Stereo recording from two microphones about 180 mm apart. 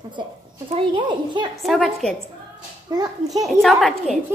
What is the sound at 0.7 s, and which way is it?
Speech, 30° right (ahead or behind).